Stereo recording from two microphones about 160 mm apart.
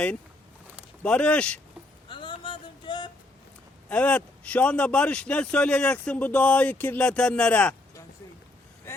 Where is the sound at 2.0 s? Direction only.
30° left (ahead or behind).